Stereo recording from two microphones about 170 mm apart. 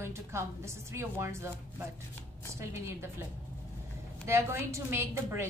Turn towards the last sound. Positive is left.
turn(degrees=-15)  # may be behind; listen again after turning